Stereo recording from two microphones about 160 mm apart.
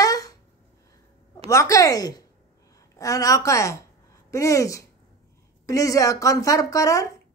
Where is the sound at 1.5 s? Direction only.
20° left (ahead or behind).